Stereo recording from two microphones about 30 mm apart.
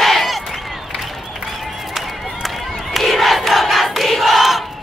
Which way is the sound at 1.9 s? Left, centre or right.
Centre.